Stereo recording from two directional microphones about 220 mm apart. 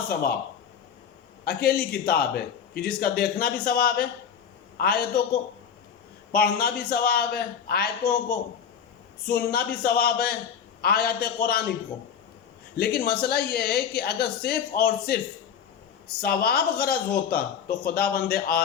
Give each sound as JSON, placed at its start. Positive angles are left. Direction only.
{"t": 0.1, "sound": "a man's voice", "side_deg": 45}
{"t": 1.5, "sound": "a man's voice", "side_deg": 45}
{"t": 6.3, "sound": "a man's voice", "side_deg": 45}
{"t": 12.7, "sound": "a man's voice", "side_deg": 45}
{"t": 16.2, "sound": "a man's voice", "side_deg": 45}